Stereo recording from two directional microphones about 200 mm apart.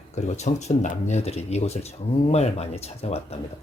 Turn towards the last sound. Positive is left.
turn(degrees=30)  # may be behind; listen again after turning